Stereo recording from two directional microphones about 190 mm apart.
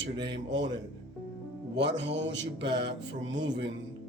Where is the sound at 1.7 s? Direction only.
65° right (ahead or behind).